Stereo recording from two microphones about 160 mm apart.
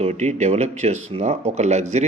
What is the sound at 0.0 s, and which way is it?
Speech, 45° right (ahead or behind).